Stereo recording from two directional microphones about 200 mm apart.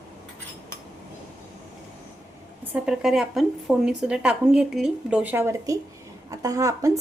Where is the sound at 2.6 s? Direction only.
5° right (ahead or behind).